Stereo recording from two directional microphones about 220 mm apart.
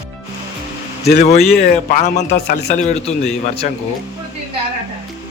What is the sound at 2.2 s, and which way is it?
A man's voice, 35° left (ahead or behind).